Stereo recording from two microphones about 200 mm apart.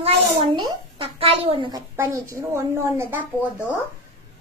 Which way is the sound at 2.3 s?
15° right (ahead or behind).